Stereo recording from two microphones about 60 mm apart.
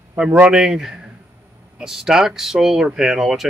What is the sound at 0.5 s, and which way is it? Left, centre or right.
Speech, centre.